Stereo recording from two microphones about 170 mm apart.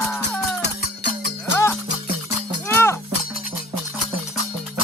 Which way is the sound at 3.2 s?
60° left (ahead or behind).